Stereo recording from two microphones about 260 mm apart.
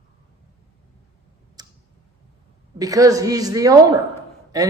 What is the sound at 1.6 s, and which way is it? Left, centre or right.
Clicking, centre.